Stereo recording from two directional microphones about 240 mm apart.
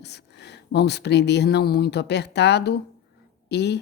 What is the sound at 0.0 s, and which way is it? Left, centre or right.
A woman's voice, left.